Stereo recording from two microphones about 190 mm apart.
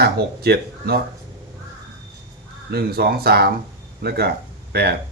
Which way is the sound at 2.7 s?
55° right (ahead or behind).